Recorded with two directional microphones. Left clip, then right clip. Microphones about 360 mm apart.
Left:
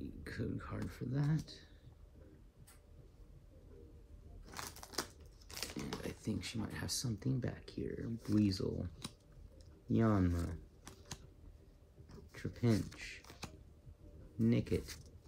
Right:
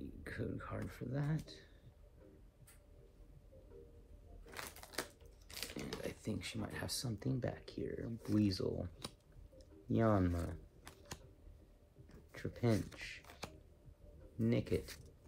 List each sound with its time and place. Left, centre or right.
0.0 s speech: centre
4.5 s typewriter: centre
5.5 s biting: centre
6.0 s speech: centre
9.9 s typing: centre
12.3 s speech: centre